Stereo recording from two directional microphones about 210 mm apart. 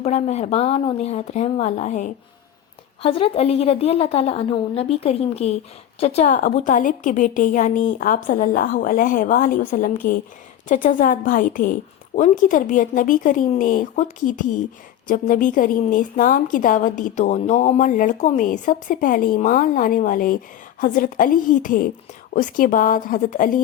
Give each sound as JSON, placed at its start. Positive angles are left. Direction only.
{"t": 0.0, "sound": "a woman's voice", "side_deg": 35}